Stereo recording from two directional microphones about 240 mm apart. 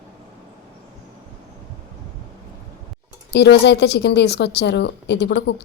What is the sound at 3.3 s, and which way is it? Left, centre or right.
A woman's voice, left.